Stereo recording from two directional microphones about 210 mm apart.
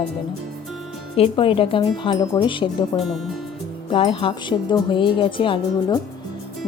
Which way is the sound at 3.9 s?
25° left (ahead or behind).